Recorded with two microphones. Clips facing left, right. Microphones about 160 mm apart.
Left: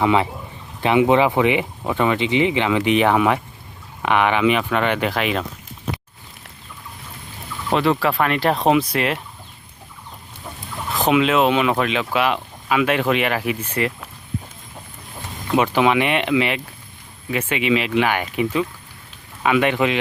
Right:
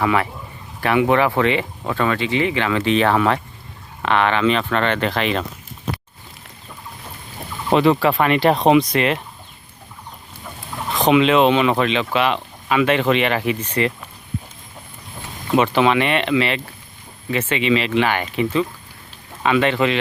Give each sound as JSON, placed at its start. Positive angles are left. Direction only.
{"t": 0.0, "sound": "speech", "side_deg": 20}
{"t": 7.7, "sound": "speech", "side_deg": 0}
{"t": 10.9, "sound": "speech", "side_deg": 5}
{"t": 15.5, "sound": "speech", "side_deg": 10}